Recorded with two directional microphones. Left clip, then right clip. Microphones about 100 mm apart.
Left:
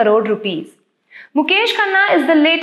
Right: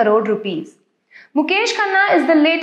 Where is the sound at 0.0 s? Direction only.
30° left (ahead or behind).